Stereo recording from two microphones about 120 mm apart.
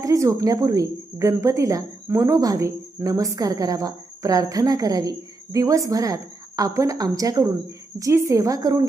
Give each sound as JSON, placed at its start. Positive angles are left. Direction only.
{"t": 0.0, "sound": "speech", "side_deg": -25}